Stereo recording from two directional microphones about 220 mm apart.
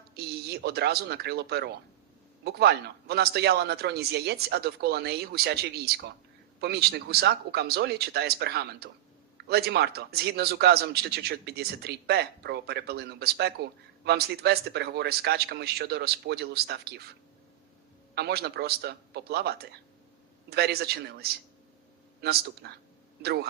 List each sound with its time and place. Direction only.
0.1 s speech: 45° right (ahead or behind)
18.1 s speech: 50° right (ahead or behind)